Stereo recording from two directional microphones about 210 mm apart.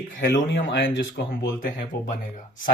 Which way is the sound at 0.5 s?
60° left (ahead or behind).